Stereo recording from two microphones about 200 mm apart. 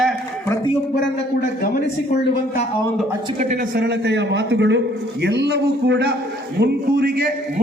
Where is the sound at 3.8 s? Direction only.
55° right (ahead or behind).